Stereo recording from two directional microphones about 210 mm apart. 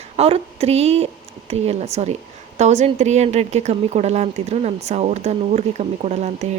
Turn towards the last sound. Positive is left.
turn(degrees=-35)  # may be behind; listen again after turning